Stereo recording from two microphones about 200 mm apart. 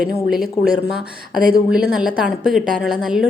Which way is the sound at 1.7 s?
5° right (ahead or behind).